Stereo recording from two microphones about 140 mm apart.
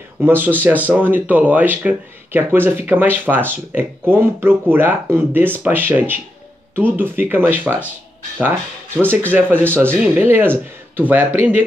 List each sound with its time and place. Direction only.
0.2 s speech: 15° right (ahead or behind)